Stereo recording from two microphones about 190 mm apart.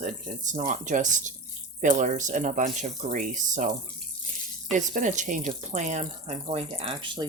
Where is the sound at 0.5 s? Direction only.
40° right (ahead or behind).